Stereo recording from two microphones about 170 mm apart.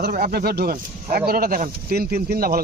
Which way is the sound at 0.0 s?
65° right (ahead or behind).